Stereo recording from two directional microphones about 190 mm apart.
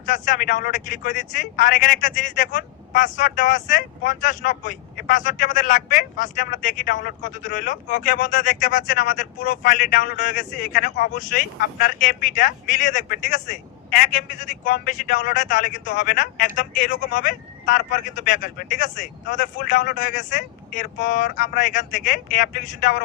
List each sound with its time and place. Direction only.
0.0 s speech: 45° left (ahead or behind)